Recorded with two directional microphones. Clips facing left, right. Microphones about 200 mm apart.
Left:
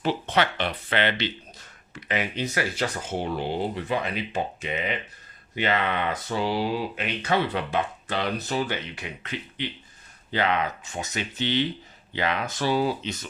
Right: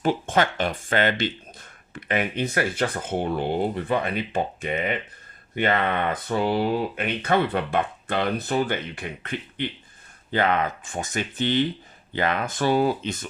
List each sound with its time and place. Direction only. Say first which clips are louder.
0.0 s speech: right 2 dB; 50° right (ahead or behind)